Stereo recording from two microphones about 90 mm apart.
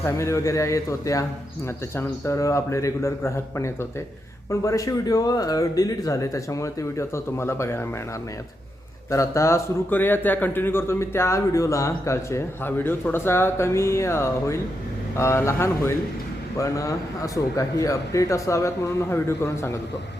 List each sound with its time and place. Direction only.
0.0 s speech: 30° left (ahead or behind)
9.0 s speech: 35° left (ahead or behind)
9.9 s a man's voice: 20° left (ahead or behind)